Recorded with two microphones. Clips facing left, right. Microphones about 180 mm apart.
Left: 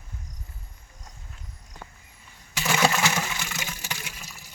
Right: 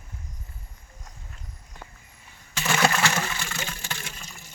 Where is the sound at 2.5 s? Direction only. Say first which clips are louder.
Even; 5° left (ahead or behind).